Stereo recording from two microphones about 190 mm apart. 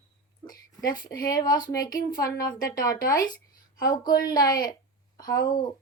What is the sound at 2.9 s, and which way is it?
Speech, 50° left (ahead or behind).